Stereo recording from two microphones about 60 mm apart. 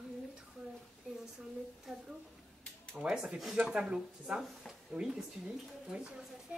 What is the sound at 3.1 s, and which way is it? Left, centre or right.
Speech, centre.